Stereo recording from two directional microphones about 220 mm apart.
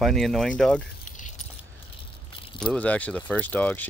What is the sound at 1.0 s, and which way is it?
Keys jangling, 35° left (ahead or behind).